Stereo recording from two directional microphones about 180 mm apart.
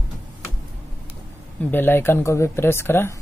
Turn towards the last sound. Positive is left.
turn(degrees=15)  # may be behind; listen again after turning